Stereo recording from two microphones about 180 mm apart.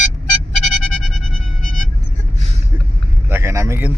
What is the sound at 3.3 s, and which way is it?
Speech, 15° right (ahead or behind).